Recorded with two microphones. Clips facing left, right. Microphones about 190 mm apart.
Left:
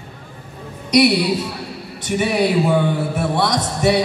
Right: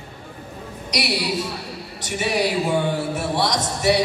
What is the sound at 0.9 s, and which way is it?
A woman's voice, 55° left (ahead or behind).